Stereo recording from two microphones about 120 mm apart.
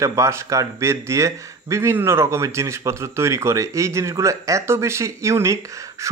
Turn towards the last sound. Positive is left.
turn(degrees=-25)  # may be behind; listen again after turning